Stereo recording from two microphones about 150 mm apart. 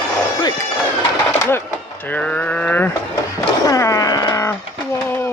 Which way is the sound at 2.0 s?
10° left (ahead or behind).